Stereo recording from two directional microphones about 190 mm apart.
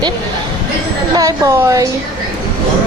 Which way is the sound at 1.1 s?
20° right (ahead or behind).